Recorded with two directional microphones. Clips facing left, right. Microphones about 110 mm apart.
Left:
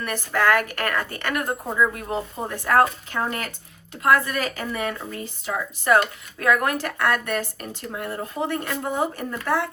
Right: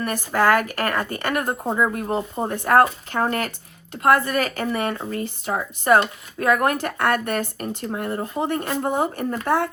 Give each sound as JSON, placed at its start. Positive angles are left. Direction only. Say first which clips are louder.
{"t": 0.0, "sound": "speech", "louder": "right 2 dB", "side_deg": -35}
{"t": 2.7, "sound": "speech", "louder": "right 2 dB", "side_deg": -50}
{"t": 5.8, "sound": "speech", "louder": "right 2 dB", "side_deg": -30}